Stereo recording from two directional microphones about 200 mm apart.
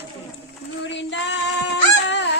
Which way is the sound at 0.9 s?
65° left (ahead or behind).